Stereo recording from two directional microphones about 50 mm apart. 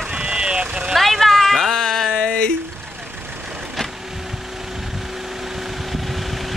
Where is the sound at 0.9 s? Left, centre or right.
Centre.